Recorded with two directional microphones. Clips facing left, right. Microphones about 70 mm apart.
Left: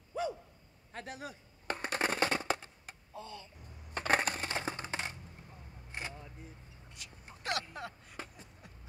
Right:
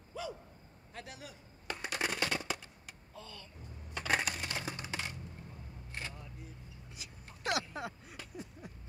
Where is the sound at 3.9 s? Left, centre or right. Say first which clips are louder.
Left 3 dB; left.